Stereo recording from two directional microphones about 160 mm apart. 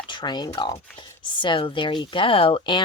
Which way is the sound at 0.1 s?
30° left (ahead or behind).